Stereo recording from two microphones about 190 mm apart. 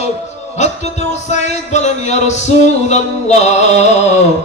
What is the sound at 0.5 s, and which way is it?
Music, 35° left (ahead or behind).